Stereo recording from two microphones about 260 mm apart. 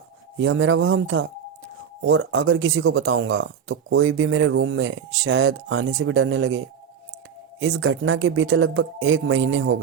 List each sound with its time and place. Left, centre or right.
0.3 s speech: right
7.6 s speech: right